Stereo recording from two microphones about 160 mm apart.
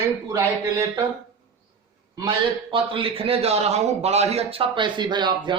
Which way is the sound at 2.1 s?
30° right (ahead or behind).